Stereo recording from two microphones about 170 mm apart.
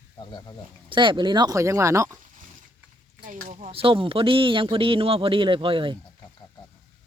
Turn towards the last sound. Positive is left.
turn(degrees=-30)  # may be behind; listen again after turning